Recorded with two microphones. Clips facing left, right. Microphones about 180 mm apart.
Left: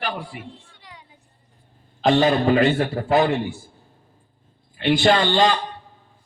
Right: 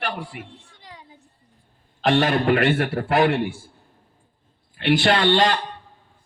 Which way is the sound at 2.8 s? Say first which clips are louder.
Left 1 dB; 70° right (ahead or behind).